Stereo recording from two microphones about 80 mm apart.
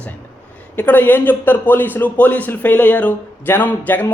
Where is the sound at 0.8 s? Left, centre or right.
Left.